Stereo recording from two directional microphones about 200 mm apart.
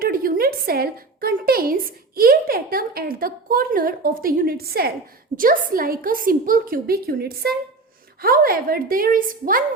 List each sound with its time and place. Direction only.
0.0 s a woman's voice: 45° right (ahead or behind)